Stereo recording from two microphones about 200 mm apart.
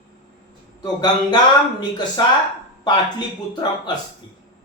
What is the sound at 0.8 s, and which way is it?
Speech, 20° left (ahead or behind).